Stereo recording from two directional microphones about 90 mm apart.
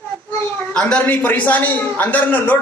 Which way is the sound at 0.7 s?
10° left (ahead or behind).